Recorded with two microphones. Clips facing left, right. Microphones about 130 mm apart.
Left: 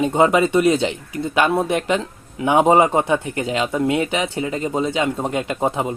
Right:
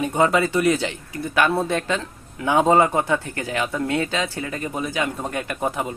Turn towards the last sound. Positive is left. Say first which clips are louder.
# left 4 dB
turn(degrees=20)  # may be behind; listen again after turning